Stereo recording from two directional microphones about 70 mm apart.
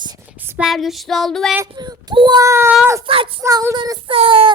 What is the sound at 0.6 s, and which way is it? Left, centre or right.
Child singing, centre.